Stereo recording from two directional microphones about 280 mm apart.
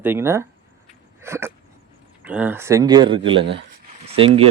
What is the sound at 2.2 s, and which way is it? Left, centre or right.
Speech, centre.